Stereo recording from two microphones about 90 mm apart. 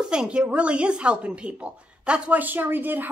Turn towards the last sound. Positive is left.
turn(degrees=-20)  # may be behind; listen again after turning